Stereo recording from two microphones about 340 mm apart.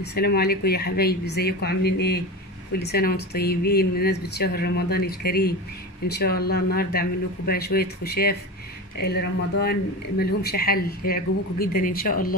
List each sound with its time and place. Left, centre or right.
0.0 s speech: left